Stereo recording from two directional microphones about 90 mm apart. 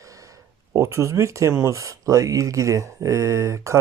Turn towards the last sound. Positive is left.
turn(degrees=-35)  # may be behind; listen again after turning